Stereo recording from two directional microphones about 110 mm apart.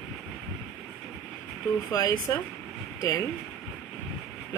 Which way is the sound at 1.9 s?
30° left (ahead or behind).